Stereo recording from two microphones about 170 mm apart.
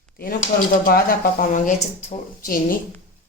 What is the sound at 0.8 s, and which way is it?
Speech, 60° left (ahead or behind).